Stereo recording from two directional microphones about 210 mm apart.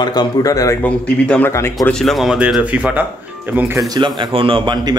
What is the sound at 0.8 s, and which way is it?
A man's voice, 5° left (ahead or behind).